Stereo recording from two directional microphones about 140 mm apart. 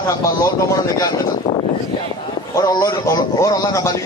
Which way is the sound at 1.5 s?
30° left (ahead or behind).